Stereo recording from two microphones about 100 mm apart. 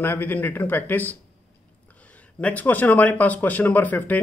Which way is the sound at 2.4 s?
15° left (ahead or behind).